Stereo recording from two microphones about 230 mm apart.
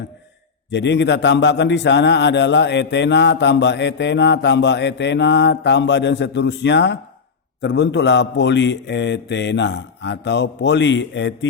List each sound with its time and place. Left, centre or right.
0.7 s a man's voice: left